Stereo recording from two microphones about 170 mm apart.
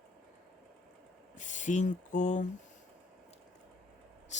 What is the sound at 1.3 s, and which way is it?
Speech, 45° left (ahead or behind).